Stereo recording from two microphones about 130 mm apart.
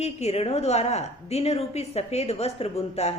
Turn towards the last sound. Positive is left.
turn(degrees=55)  # may be behind; listen again after turning